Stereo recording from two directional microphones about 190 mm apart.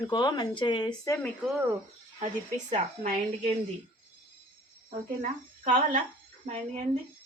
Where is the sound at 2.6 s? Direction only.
40° right (ahead or behind).